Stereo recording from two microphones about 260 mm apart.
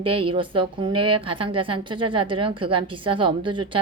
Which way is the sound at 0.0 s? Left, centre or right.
Right.